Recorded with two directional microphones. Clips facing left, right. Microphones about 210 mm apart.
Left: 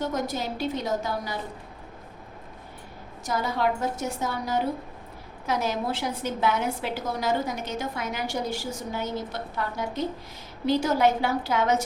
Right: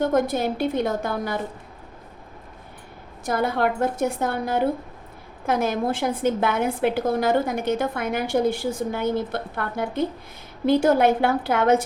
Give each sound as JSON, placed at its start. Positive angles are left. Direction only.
{"t": 0.0, "sound": "a woman's voice", "side_deg": -55}
{"t": 3.2, "sound": "a woman's voice", "side_deg": -55}